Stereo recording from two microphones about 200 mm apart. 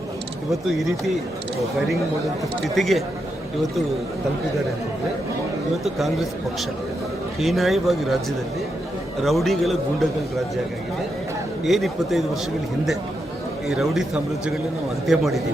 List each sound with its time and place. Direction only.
0.5 s a man's voice: centre (ahead or behind)
2.7 s a man's voice: centre (ahead or behind)
5.8 s a man's voice: centre (ahead or behind)
9.2 s a man's voice: centre (ahead or behind)
11.6 s a man's voice: centre (ahead or behind)
13.7 s a man's voice: centre (ahead or behind)